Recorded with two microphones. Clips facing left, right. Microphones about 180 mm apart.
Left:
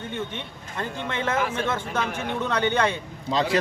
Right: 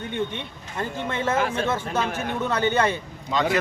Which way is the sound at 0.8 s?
10° right (ahead or behind).